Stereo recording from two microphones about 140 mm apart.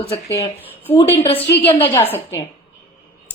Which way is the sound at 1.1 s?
40° left (ahead or behind).